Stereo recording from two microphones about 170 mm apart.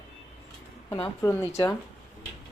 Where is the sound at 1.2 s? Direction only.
15° left (ahead or behind).